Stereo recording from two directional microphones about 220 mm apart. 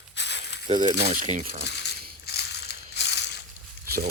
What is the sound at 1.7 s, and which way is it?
Coin, 50° left (ahead or behind).